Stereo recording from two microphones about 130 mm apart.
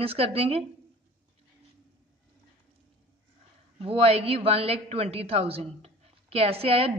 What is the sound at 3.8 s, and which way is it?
A woman's voice, 50° right (ahead or behind).